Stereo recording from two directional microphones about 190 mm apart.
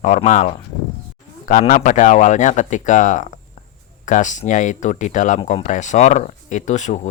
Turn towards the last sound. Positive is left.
turn(degrees=40)  # may be behind; listen again after turning